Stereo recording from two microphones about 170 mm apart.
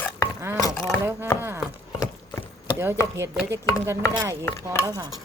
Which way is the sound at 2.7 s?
15° right (ahead or behind).